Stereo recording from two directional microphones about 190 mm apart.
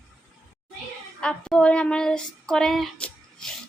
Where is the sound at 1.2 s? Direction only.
5° left (ahead or behind).